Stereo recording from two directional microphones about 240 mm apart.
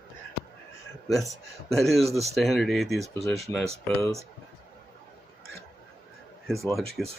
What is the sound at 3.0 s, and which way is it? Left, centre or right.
Speech, right.